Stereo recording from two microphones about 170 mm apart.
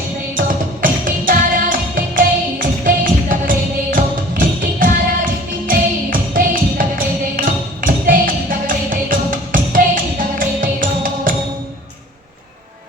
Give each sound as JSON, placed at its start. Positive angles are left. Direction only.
{"t": 0.3, "sound": "music", "side_deg": -55}